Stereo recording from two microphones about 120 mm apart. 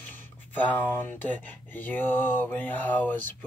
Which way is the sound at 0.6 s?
15° left (ahead or behind).